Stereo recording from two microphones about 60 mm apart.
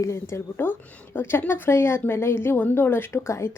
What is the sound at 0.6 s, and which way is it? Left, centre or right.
Speech, left.